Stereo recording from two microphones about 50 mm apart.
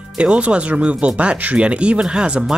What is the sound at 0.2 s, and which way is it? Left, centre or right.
Speech, right.